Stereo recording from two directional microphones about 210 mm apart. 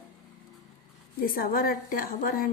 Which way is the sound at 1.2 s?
45° left (ahead or behind).